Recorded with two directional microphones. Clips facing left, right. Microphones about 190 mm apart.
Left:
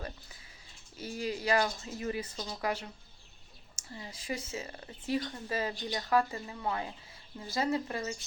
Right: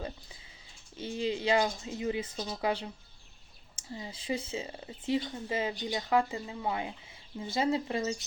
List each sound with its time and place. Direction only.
0.9 s speech: 25° right (ahead or behind)
3.9 s speech: 20° right (ahead or behind)